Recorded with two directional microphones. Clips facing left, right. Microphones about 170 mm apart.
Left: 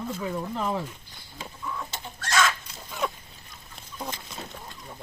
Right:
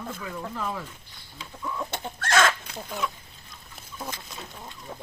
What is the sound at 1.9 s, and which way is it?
Chicken, 55° right (ahead or behind).